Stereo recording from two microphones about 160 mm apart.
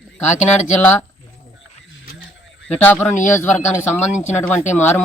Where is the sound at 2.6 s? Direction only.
10° left (ahead or behind).